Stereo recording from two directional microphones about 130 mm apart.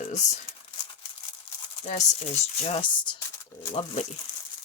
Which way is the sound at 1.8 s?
65° left (ahead or behind).